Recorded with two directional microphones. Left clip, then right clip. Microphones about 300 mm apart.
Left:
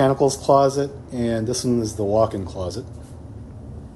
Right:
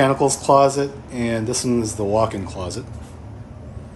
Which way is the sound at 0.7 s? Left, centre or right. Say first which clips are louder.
Right 1 dB; centre.